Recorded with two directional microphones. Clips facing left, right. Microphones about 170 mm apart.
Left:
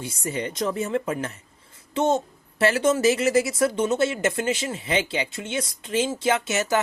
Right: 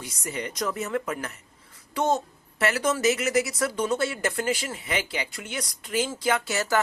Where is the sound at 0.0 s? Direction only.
30° left (ahead or behind).